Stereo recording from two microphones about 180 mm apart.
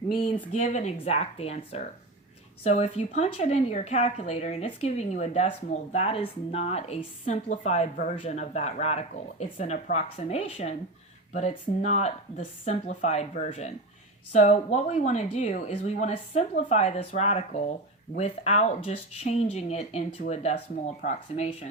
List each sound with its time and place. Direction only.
0.5 s speech: 40° left (ahead or behind)
10.2 s speech: 35° left (ahead or behind)